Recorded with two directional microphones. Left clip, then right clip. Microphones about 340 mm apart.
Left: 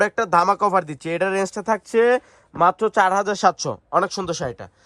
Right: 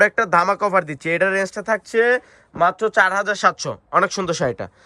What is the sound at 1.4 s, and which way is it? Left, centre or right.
Speech, centre.